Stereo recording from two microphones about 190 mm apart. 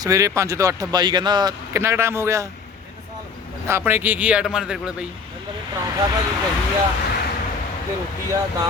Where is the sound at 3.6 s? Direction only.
10° right (ahead or behind).